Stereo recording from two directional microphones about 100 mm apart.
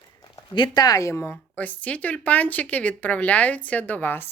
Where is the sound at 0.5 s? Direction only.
50° left (ahead or behind); by 1.4 s 25° left (ahead or behind).